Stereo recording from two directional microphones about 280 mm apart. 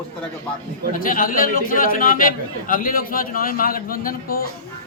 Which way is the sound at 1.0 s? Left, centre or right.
Left.